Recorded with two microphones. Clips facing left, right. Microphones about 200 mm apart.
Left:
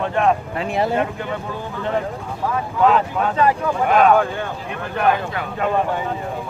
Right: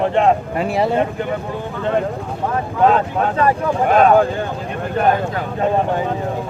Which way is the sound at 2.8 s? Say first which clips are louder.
Right 2 dB; 30° right (ahead or behind).